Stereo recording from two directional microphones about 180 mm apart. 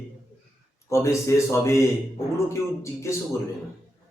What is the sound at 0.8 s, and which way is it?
Speech, 15° left (ahead or behind).